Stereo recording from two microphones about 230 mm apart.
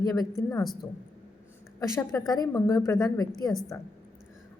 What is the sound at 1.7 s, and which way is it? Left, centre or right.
A woman's voice, centre.